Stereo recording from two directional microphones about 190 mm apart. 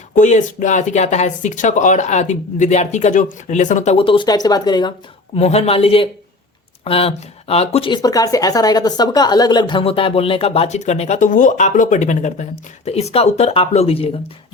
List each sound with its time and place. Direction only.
0.1 s speech: 40° left (ahead or behind); by 4.9 s 25° left (ahead or behind)
5.4 s speech: 35° left (ahead or behind)